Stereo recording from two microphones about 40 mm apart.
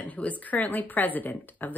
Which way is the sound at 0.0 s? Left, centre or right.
Left.